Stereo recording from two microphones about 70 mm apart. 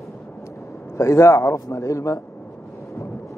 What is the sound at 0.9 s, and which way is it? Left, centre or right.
A man's voice, left.